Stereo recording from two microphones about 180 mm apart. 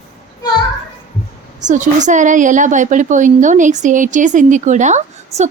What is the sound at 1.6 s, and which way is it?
A woman's voice, 45° right (ahead or behind).